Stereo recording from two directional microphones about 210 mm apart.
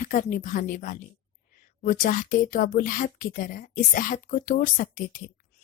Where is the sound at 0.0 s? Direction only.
40° left (ahead or behind).